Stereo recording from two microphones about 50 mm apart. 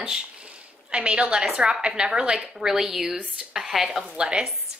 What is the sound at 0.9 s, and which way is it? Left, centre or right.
A woman's voice, right.